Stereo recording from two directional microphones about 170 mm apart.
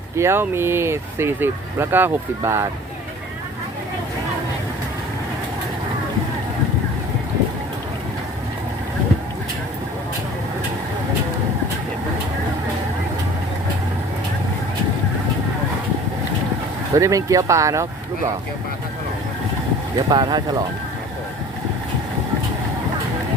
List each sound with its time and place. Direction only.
0.2 s speech: 15° right (ahead or behind)
16.9 s speech: 20° right (ahead or behind)
20.1 s speech: 25° right (ahead or behind)